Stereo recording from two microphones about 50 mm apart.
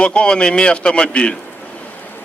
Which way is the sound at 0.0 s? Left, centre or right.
Left.